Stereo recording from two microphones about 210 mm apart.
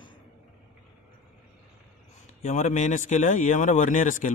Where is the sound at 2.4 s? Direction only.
35° left (ahead or behind).